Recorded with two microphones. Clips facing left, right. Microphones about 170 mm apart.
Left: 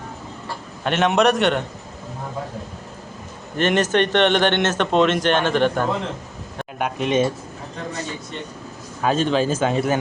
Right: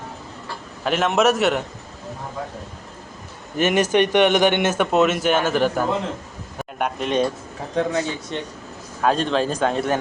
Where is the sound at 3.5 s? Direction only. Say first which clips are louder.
Right 1 dB; 10° right (ahead or behind).